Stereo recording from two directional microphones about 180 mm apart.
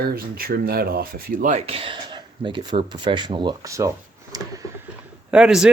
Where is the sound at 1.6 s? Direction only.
30° right (ahead or behind).